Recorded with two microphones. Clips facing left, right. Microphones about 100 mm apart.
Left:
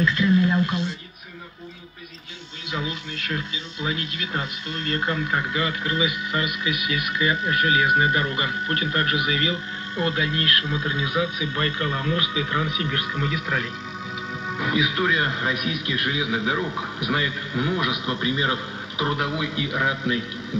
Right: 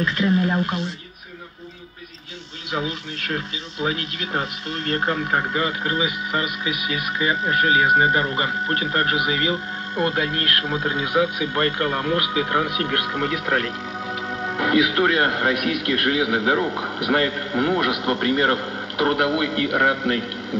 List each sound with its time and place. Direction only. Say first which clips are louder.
0.0 s speech: even; 40° right (ahead or behind)
3.3 s a man's voice: right 2 dB; 40° right (ahead or behind); by 20.2 s 70° right (ahead or behind)